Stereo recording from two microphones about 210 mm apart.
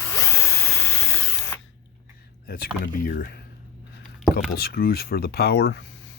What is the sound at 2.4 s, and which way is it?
Speech, 45° left (ahead or behind).